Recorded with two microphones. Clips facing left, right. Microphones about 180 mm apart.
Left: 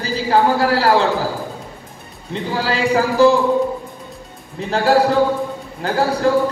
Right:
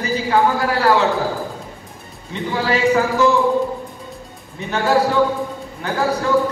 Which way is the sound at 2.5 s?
35° left (ahead or behind).